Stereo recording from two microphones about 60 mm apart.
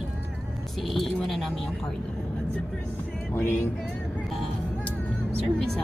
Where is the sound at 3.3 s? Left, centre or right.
Left.